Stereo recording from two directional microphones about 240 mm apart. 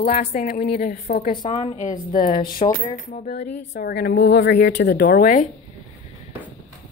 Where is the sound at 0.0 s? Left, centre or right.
Left.